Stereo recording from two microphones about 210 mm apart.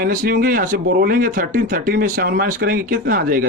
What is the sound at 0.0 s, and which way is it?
Speech, 40° right (ahead or behind).